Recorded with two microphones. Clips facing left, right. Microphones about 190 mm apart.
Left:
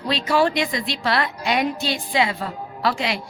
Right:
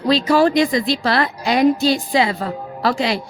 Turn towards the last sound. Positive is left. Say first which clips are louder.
# right 4 dB
turn(degrees=-35)  # may be behind; listen again after turning